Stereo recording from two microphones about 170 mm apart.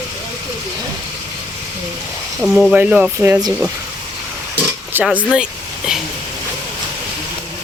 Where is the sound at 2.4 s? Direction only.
Centre (ahead or behind).